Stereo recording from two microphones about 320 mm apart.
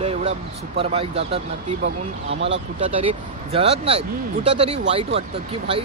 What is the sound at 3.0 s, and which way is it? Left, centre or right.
Speech, centre.